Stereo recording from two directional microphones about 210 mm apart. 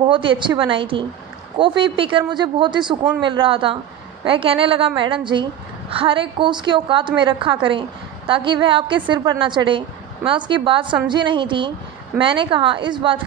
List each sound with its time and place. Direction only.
0.1 s a woman's voice: 25° right (ahead or behind)